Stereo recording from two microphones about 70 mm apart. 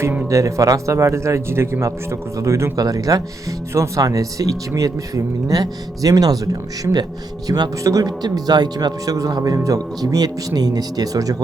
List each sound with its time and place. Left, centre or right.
0.3 s a man's voice: right
2.7 s speech: right